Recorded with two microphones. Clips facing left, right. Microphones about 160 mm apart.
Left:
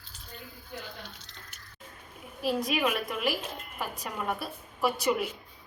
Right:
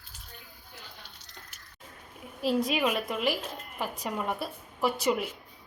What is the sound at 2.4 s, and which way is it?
A woman's voice, 25° right (ahead or behind).